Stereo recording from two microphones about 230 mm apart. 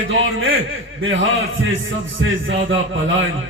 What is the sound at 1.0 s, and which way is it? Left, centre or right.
A man's voice, right.